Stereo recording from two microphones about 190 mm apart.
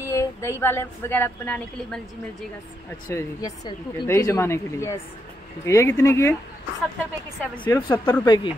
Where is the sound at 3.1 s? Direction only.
15° left (ahead or behind).